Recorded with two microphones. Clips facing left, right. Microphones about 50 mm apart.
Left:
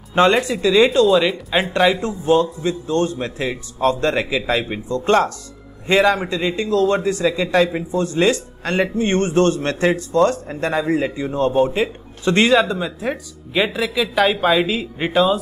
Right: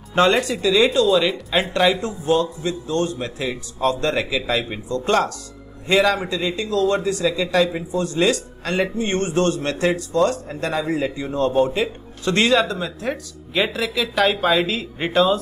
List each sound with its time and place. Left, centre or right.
0.1 s a man's voice: centre
1.0 s speech: centre
2.0 s a man's voice: left; by 15.4 s centre